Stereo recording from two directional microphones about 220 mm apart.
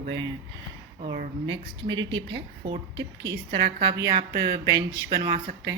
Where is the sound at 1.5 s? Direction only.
60° right (ahead or behind).